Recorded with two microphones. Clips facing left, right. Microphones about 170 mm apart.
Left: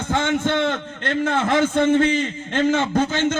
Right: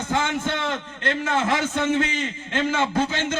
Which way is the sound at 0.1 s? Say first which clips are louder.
Left 5 dB; 55° left (ahead or behind).